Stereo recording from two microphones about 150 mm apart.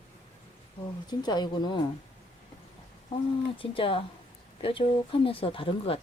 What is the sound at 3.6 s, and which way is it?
Speech, 35° left (ahead or behind).